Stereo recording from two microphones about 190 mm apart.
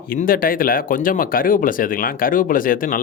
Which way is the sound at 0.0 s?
50° left (ahead or behind).